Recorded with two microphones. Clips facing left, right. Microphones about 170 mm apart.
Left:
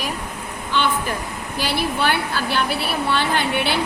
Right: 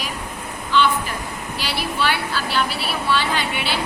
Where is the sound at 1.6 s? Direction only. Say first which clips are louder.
Left 3 dB; 50° left (ahead or behind).